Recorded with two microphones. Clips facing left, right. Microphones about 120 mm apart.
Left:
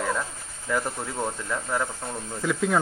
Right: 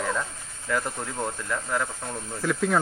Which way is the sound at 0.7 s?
10° left (ahead or behind).